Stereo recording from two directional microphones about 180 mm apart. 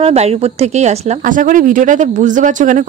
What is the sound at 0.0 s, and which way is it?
Speech, 35° right (ahead or behind).